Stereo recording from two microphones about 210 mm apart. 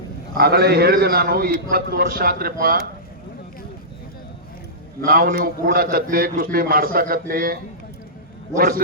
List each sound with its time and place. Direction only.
0.3 s a man's voice: 50° right (ahead or behind)
5.0 s a man's voice: 45° right (ahead or behind)